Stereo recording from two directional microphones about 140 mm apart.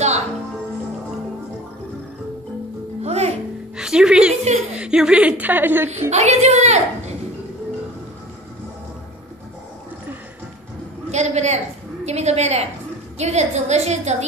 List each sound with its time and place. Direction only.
3.0 s music: 50° right (ahead or behind)
3.7 s music: 5° right (ahead or behind)
4.3 s chuckle: 55° right (ahead or behind)
4.7 s a woman's voice: 5° right (ahead or behind)
5.9 s a woman's voice: 55° right (ahead or behind)
11.1 s a woman's voice: 55° right (ahead or behind)